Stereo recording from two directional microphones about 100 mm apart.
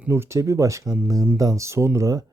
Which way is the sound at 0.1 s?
25° right (ahead or behind).